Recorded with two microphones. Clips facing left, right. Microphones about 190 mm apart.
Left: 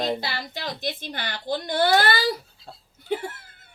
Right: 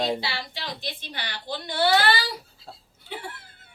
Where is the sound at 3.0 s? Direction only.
45° left (ahead or behind).